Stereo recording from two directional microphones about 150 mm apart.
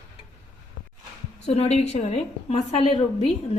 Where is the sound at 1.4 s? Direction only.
45° left (ahead or behind).